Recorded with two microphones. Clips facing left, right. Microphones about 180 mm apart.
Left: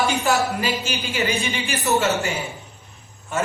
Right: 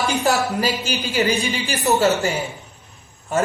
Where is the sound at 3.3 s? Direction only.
40° right (ahead or behind).